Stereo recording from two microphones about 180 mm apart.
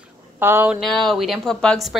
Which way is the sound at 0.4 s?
10° right (ahead or behind).